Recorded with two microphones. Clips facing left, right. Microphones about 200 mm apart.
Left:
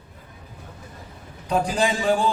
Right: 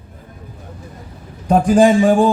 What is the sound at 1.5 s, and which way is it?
Speech, 50° right (ahead or behind).